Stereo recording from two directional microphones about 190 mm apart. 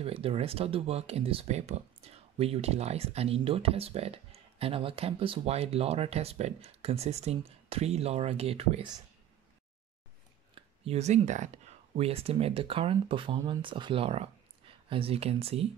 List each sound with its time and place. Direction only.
0.0 s speech: 30° right (ahead or behind)
10.5 s speech: 35° right (ahead or behind)